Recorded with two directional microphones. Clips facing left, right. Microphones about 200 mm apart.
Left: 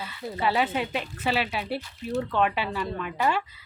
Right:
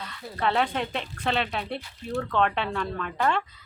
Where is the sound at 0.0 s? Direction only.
5° left (ahead or behind).